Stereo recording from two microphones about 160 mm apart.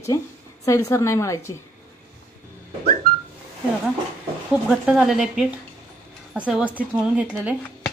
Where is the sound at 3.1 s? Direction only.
65° right (ahead or behind).